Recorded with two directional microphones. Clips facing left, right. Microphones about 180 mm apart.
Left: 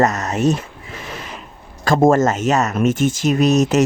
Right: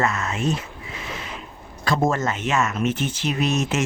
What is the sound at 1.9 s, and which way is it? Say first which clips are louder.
Speech: left 8 dB; 45° left (ahead or behind).